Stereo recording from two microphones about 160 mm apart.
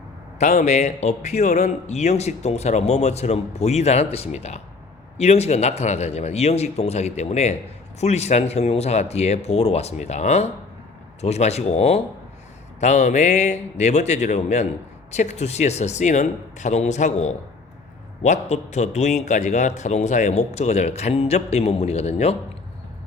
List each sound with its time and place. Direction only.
0.3 s a man's voice: 45° left (ahead or behind)